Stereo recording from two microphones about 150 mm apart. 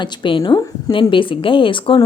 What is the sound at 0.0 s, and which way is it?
A woman's voice, 30° left (ahead or behind).